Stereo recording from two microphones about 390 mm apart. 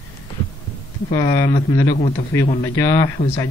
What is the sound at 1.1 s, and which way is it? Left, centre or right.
Speech, centre.